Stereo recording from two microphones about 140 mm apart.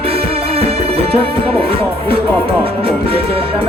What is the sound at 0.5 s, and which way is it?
Music, 45° right (ahead or behind).